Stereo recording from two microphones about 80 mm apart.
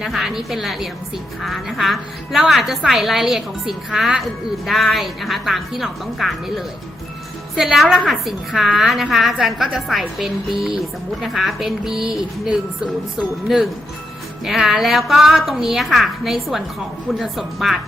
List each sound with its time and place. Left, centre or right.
0.0 s a woman's voice: centre